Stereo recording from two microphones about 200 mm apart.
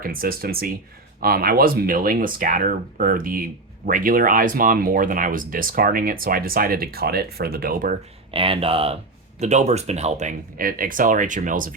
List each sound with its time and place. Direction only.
0.0 s speech: 45° right (ahead or behind)
8.3 s speech: 30° right (ahead or behind)